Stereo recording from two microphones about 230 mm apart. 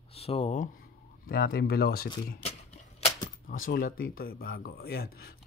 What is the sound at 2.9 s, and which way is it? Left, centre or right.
Typewriter, left.